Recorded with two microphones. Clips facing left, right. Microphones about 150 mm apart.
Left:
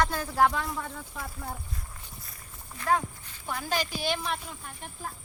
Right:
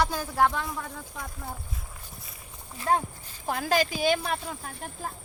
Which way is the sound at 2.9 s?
30° right (ahead or behind).